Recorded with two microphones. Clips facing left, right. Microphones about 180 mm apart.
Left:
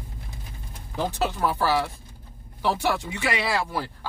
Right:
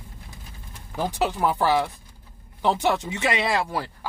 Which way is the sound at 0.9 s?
15° right (ahead or behind).